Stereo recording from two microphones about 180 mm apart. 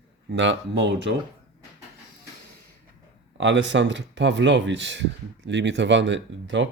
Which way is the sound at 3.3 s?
85° right.